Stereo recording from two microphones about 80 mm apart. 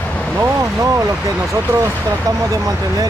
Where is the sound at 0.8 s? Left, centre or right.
Right.